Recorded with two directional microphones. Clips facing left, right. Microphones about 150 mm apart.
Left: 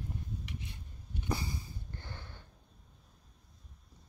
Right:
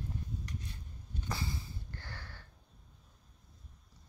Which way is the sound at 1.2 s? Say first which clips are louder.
Left 3 dB; 15° left (ahead or behind).